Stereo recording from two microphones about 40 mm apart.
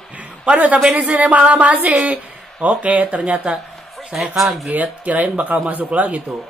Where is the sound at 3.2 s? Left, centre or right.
Right.